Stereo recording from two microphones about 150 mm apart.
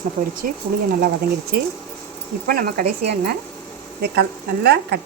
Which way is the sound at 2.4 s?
80° right.